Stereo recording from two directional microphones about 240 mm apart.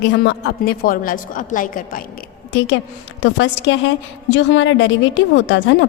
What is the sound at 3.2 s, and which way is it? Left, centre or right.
A woman's voice, left.